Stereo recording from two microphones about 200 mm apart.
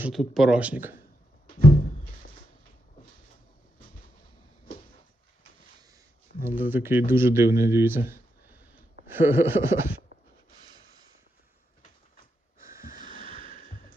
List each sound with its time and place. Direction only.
0.0 s speech: centre (ahead or behind)
6.6 s speech: 10° right (ahead or behind)
13.5 s a sound: 45° left (ahead or behind)